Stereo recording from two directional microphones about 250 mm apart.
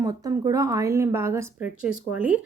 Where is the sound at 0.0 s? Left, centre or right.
Centre.